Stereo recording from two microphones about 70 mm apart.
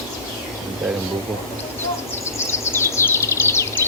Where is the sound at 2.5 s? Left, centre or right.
Left.